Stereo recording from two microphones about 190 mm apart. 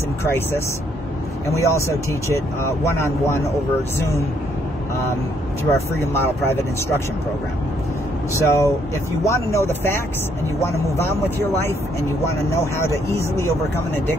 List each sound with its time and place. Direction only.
0.2 s speech: 15° left (ahead or behind)
6.1 s speech: 10° left (ahead or behind)
8.3 s speech: 15° left (ahead or behind)